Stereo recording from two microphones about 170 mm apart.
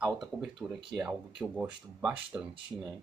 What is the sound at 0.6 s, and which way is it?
Speech, 5° right (ahead or behind).